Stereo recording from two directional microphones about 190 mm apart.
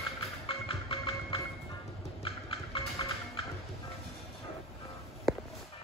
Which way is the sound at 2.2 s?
30° left (ahead or behind).